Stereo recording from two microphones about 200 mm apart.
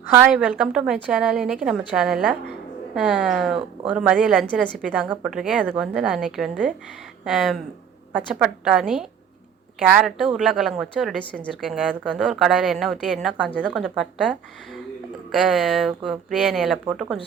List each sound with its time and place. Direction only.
0.1 s a woman's voice: 5° right (ahead or behind)
13.5 s a woman's voice: 5° left (ahead or behind)